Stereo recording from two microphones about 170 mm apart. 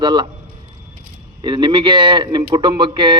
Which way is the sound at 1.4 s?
25° right (ahead or behind).